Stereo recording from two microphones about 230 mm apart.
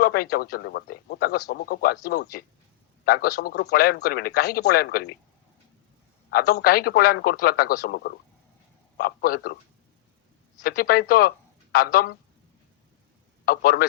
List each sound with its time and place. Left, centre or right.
0.0 s a man's voice: left
3.0 s a man's voice: left
6.3 s a man's voice: left
10.6 s speech: left
13.4 s a man's voice: left